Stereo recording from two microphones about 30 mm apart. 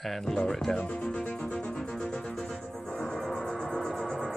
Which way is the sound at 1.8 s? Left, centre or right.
Centre.